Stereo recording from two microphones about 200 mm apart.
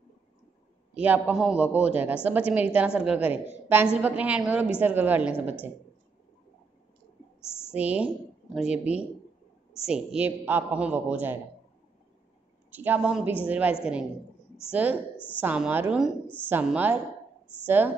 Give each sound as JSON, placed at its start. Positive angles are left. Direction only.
{"t": 0.9, "sound": "a woman's voice", "side_deg": -10}
{"t": 7.4, "sound": "a sound", "side_deg": 10}
{"t": 7.7, "sound": "a woman's voice", "side_deg": -5}
{"t": 12.7, "sound": "a woman's voice", "side_deg": -10}
{"t": 15.1, "sound": "a woman's voice", "side_deg": 10}
{"t": 15.4, "sound": "a woman's voice", "side_deg": -10}